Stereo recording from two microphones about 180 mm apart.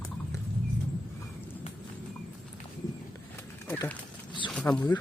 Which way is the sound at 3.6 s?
10° left (ahead or behind).